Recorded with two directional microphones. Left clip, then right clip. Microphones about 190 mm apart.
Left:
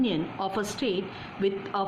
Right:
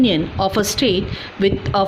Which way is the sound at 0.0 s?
40° right (ahead or behind).